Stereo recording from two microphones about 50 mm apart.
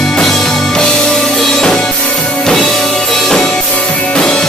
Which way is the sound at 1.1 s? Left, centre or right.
Centre.